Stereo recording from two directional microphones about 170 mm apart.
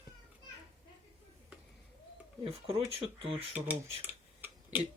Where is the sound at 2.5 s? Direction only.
35° right (ahead or behind).